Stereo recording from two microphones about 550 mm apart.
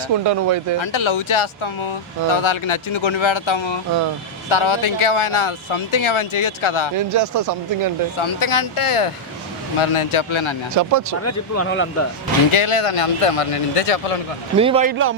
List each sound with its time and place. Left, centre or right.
0.3 s speech: right
0.8 s speech: left
6.9 s speech: right
8.2 s speech: left
10.8 s speech: right
11.2 s speech: left
12.5 s speech: left
14.6 s speech: centre